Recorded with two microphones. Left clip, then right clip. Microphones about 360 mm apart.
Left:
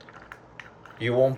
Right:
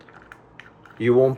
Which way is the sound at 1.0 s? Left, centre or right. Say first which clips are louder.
Right 5 dB; centre.